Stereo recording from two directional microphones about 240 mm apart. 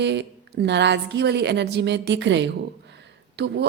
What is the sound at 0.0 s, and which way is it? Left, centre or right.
A woman's voice, right.